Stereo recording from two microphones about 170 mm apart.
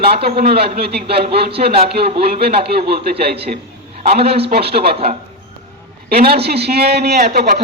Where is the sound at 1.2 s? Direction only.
35° right (ahead or behind).